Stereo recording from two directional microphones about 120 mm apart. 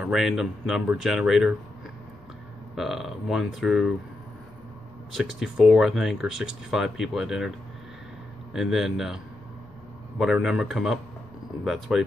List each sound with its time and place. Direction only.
0.0 s speech: 5° right (ahead or behind)
2.7 s speech: 5° right (ahead or behind)
5.1 s speech: 5° right (ahead or behind)
8.5 s speech: 5° right (ahead or behind)